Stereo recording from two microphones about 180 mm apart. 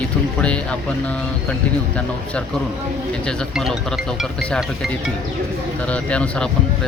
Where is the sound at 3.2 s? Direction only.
Centre (ahead or behind).